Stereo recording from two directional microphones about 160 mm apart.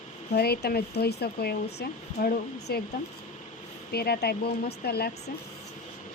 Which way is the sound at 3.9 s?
80° left.